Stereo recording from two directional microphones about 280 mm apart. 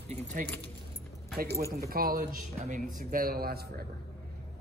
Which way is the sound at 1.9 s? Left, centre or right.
Right.